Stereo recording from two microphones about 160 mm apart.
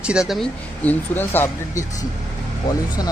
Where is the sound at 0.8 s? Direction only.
10° left (ahead or behind).